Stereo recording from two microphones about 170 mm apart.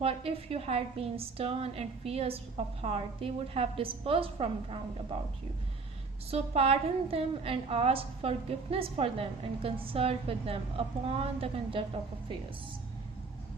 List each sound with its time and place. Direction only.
0.0 s a woman's voice: 35° right (ahead or behind)
6.3 s a woman's voice: 35° right (ahead or behind)